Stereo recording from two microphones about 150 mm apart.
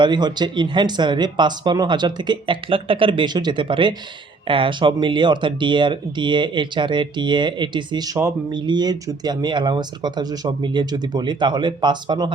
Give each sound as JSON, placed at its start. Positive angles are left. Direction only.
{"t": 0.0, "sound": "speech", "side_deg": -30}